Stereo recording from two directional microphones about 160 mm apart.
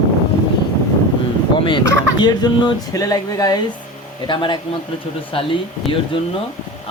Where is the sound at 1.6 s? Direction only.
30° left (ahead or behind).